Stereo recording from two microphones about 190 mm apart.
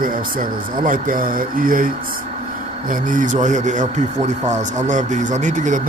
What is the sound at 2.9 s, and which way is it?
Speech, 45° right (ahead or behind).